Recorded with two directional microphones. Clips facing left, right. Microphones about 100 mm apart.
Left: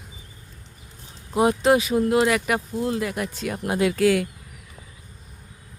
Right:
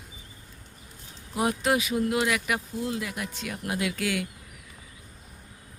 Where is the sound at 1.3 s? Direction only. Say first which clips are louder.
Left 7 dB; 25° left (ahead or behind).